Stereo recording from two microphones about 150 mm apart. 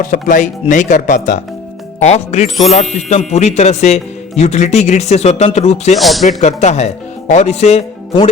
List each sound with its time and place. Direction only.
0.0 s speech: 60° left (ahead or behind)
2.0 s speech: 50° left (ahead or behind)
6.0 s speech: centre (ahead or behind)
6.2 s speech: 50° left (ahead or behind)